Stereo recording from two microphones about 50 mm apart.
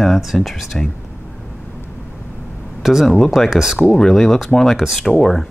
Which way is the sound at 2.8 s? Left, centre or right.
Centre.